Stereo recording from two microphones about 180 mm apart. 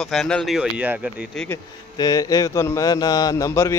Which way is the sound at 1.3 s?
10° left (ahead or behind).